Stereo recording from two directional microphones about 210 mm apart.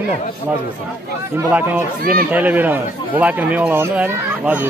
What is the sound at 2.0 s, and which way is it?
Speech, 45° right (ahead or behind).